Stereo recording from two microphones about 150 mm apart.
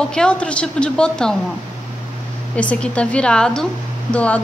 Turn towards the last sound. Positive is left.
turn(degrees=10)  # may be behind; listen again after turning